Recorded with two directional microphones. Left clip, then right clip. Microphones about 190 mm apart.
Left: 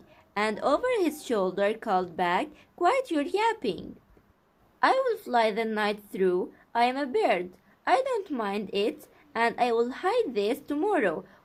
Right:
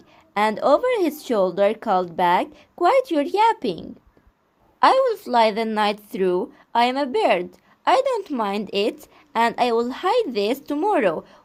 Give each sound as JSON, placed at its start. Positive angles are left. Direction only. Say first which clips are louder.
{"t": 0.3, "sound": "speech", "louder": "right 8 dB", "side_deg": -20}